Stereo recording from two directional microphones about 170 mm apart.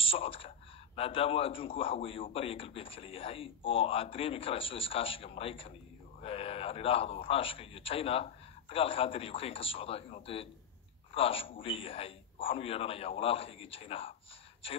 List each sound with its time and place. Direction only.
0.0 s a man's voice: 35° left (ahead or behind)